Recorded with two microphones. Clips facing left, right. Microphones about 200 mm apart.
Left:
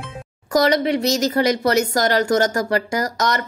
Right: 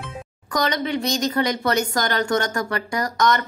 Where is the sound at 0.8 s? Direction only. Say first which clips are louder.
Left 4 dB; 70° left (ahead or behind).